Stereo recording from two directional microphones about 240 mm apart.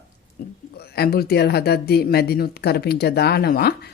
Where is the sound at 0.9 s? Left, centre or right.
Left.